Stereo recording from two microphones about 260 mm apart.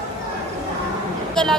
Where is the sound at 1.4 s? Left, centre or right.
Centre.